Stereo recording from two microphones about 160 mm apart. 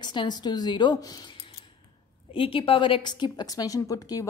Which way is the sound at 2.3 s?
35° left (ahead or behind).